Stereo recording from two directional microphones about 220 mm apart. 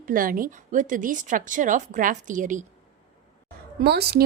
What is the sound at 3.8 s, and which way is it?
Speech, 45° right (ahead or behind).